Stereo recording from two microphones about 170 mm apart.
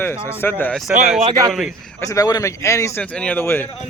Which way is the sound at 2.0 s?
20° left (ahead or behind).